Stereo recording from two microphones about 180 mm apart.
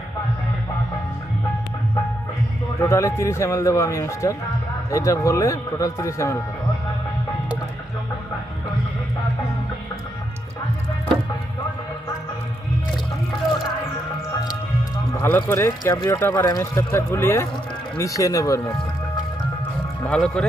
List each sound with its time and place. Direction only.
2.8 s speech: 15° left (ahead or behind)
15.2 s speech: 15° left (ahead or behind)
20.1 s speech: 5° left (ahead or behind)